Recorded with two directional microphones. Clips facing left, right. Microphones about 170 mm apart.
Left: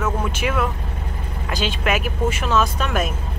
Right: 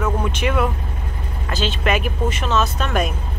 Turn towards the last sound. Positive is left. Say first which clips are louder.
# right 1 dB
turn(degrees=5)  # may be behind; listen again after turning